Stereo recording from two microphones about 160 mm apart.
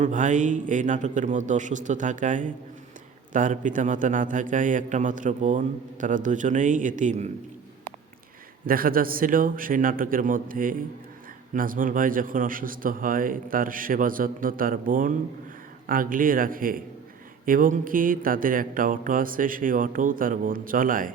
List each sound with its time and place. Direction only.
0.0 s a man's voice: 50° right (ahead or behind)
8.6 s speech: 65° right (ahead or behind)